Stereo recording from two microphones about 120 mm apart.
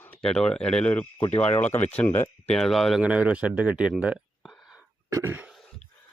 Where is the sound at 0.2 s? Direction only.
5° left (ahead or behind).